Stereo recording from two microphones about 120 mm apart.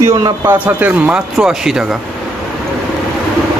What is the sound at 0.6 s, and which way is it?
Speech, 10° right (ahead or behind).